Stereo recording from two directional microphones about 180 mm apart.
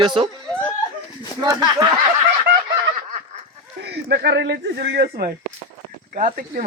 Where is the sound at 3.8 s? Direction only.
65° right (ahead or behind).